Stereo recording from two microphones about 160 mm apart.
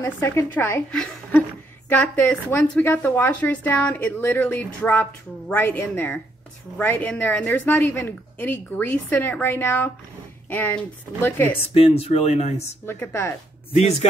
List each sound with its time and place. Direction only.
0.0 s speech: 15° left (ahead or behind)
11.7 s speech: 40° left (ahead or behind)
12.8 s speech: 15° left (ahead or behind)